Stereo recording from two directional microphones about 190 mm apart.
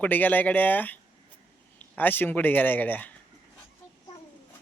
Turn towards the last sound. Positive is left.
turn(degrees=10)  # may be behind; listen again after turning